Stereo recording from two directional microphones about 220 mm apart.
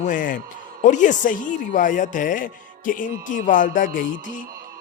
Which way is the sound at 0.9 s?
35° left (ahead or behind).